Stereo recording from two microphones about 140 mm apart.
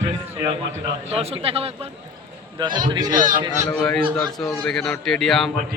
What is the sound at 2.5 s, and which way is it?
Speech, 30° right (ahead or behind).